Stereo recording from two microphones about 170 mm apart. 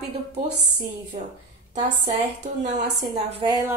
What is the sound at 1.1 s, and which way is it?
Speech, 40° right (ahead or behind).